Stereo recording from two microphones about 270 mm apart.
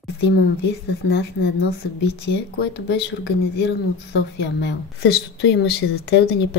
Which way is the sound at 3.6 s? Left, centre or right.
Left.